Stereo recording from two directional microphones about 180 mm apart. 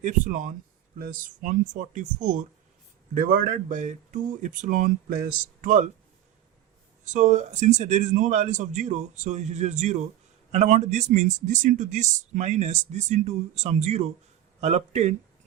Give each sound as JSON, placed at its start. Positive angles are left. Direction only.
{"t": 0.0, "sound": "speech", "side_deg": -45}
{"t": 7.0, "sound": "speech", "side_deg": -40}